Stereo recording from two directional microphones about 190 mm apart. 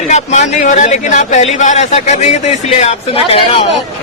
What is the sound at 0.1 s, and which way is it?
A man's voice, 40° left (ahead or behind).